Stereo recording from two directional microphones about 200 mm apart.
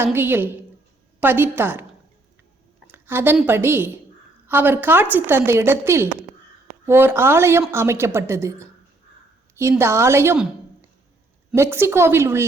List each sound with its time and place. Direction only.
0.0 s a woman's voice: 10° right (ahead or behind)
2.8 s a woman's voice: 10° right (ahead or behind)